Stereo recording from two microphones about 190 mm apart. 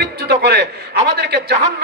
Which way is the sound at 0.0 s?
60° right (ahead or behind).